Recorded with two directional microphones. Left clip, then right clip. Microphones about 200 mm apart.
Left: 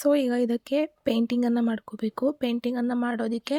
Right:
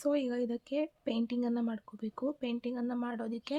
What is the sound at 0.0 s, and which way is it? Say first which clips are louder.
Speech: left 9 dB; 40° left (ahead or behind).